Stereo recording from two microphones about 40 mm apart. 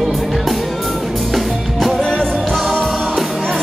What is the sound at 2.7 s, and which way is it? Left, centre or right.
Music, centre.